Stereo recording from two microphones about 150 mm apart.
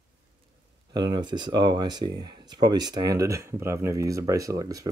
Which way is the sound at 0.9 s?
30° right (ahead or behind).